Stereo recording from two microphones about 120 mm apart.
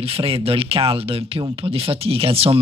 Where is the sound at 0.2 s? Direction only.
50° right (ahead or behind).